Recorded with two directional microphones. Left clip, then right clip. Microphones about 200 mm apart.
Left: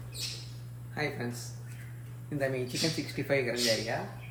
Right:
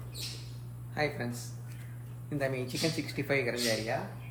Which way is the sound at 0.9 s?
Centre (ahead or behind).